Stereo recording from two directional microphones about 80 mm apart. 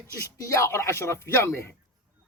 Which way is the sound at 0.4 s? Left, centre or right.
Left.